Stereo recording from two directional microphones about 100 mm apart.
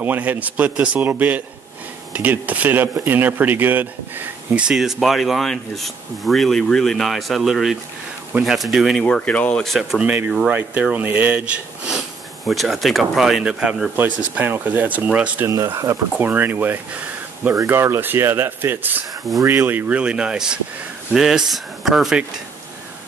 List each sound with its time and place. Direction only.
0.0 s speech: 20° right (ahead or behind); by 7.7 s centre (ahead or behind)
8.3 s speech: 15° right (ahead or behind)
9.0 s speech: 10° left (ahead or behind)
9.8 s speech: 5° right (ahead or behind)
13.9 s speech: 15° right (ahead or behind)
15.4 s speech: 30° right (ahead or behind)
16.2 s speech: 20° right (ahead or behind)